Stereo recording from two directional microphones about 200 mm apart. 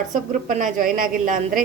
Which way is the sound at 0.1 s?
40° right (ahead or behind).